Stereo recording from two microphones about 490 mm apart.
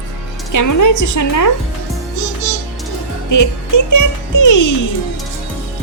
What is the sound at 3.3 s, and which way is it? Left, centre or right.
A woman's voice, left.